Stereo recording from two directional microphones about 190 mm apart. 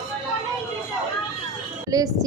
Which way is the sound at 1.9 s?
20° right (ahead or behind).